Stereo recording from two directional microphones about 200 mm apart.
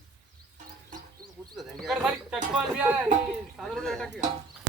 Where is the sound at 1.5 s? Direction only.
Centre (ahead or behind).